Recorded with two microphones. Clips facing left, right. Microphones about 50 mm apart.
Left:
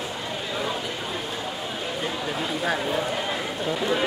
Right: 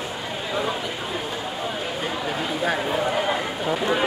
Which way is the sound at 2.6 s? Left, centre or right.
Centre.